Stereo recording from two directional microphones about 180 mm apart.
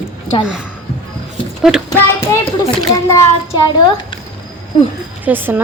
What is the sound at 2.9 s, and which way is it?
Speech, 15° left (ahead or behind).